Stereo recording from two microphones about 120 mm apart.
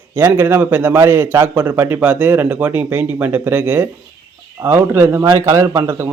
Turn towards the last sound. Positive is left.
turn(degrees=-20)  # may be behind; listen again after turning